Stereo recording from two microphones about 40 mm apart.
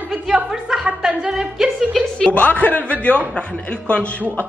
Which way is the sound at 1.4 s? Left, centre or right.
Centre.